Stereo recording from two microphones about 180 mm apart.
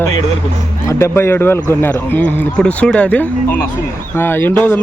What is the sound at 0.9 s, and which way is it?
Speech, 15° left (ahead or behind).